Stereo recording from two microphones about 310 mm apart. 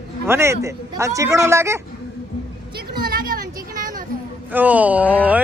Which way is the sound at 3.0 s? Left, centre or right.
Right.